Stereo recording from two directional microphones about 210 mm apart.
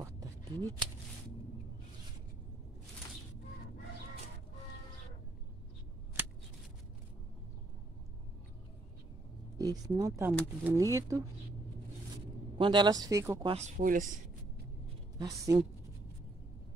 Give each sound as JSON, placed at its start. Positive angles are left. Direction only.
{"t": 0.0, "sound": "a sound", "side_deg": -15}
{"t": 9.6, "sound": "speech", "side_deg": -15}
{"t": 12.5, "sound": "speech", "side_deg": -20}
{"t": 13.5, "sound": "speech", "side_deg": -35}
{"t": 15.1, "sound": "speech", "side_deg": -15}